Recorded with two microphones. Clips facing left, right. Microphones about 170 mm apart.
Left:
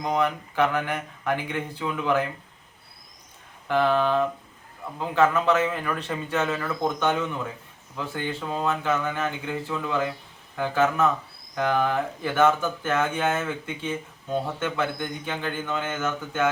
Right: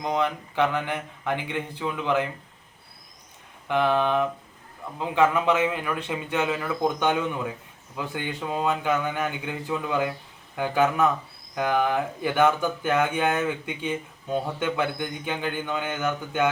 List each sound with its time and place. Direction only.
0.0 s speech: 20° right (ahead or behind)
3.7 s speech: 15° right (ahead or behind)
8.3 s speech: 15° right (ahead or behind)